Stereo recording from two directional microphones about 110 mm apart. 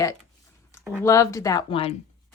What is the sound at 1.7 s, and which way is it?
Speech, 55° left (ahead or behind).